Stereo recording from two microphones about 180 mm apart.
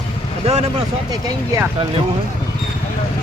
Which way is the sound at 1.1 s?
20° right (ahead or behind).